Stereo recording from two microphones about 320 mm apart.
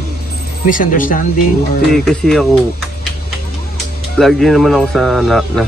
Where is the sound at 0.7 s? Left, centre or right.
Left.